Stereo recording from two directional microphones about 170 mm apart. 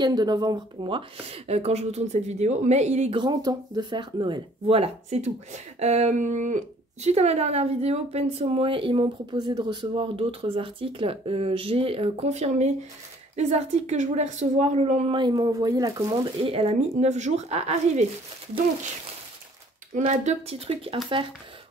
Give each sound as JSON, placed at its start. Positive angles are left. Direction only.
{"t": 0.0, "sound": "speech", "side_deg": -25}
{"t": 3.2, "sound": "speech", "side_deg": -25}
{"t": 16.3, "sound": "speech", "side_deg": -35}
{"t": 19.9, "sound": "speech", "side_deg": -45}